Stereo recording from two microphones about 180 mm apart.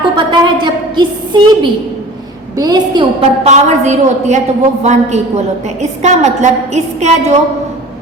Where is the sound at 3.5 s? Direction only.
40° right (ahead or behind).